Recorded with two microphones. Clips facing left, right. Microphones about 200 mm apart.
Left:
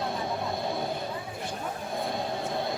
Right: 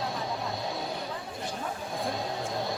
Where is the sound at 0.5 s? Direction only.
55° left (ahead or behind).